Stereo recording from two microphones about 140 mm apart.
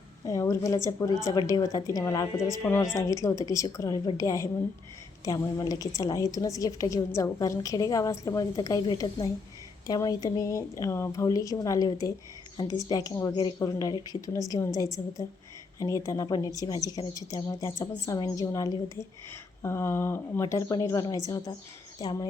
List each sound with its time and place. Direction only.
0.3 s a woman's voice: 25° left (ahead or behind)
12.9 s a woman's voice: 25° left (ahead or behind)